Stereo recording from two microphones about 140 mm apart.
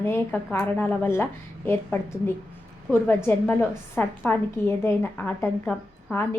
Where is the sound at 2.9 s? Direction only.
Centre (ahead or behind).